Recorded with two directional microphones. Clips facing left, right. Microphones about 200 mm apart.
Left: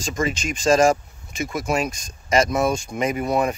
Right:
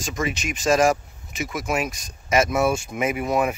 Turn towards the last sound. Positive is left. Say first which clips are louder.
# left 1 dB
turn(degrees=-5)  # may be behind; listen again after turning